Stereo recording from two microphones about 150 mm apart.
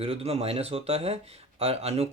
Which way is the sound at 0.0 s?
40° right (ahead or behind).